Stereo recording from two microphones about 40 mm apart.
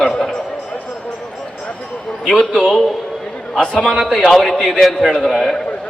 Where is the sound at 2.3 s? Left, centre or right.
Centre.